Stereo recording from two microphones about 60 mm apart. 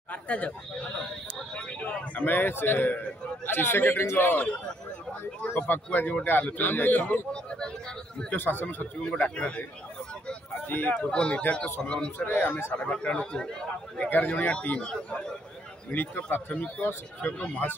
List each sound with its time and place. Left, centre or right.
0.1 s a man's voice: left
5.6 s a man's voice: left
8.4 s a man's voice: left
10.7 s a man's voice: left
11.0 s a man's voice: centre
12.3 s a man's voice: left
12.7 s a man's voice: centre
14.0 s speech: left
15.9 s speech: left